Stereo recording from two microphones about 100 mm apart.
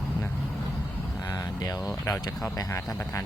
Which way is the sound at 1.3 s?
40° left (ahead or behind).